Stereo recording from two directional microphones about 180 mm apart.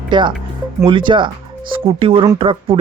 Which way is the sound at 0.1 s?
25° right (ahead or behind).